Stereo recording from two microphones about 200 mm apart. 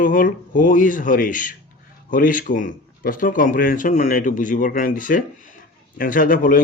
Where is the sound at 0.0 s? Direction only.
40° left (ahead or behind).